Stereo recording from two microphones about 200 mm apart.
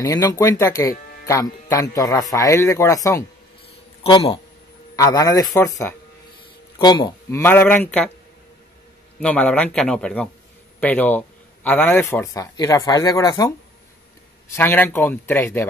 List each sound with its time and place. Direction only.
0.0 s a man's voice: 15° left (ahead or behind)
4.0 s speech: 30° left (ahead or behind)
4.9 s a man's voice: 15° left (ahead or behind)
9.2 s a man's voice: 5° left (ahead or behind)
14.5 s a man's voice: 10° left (ahead or behind)